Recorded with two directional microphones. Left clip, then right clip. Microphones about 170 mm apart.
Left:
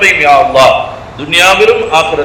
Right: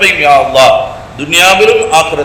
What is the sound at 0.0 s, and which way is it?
A man's voice, 50° right (ahead or behind).